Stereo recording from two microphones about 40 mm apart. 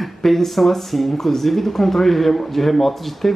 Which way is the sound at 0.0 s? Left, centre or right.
Centre.